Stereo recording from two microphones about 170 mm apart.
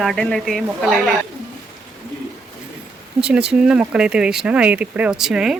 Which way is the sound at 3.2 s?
5° right (ahead or behind).